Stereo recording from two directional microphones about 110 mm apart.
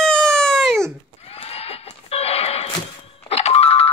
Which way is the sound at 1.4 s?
65° left (ahead or behind).